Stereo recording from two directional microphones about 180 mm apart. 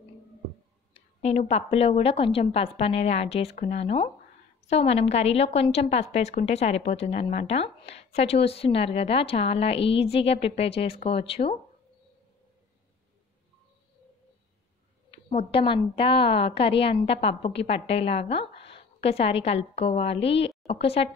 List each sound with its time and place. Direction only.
1.2 s a woman's voice: 35° left (ahead or behind)
15.0 s a woman's voice: 35° left (ahead or behind)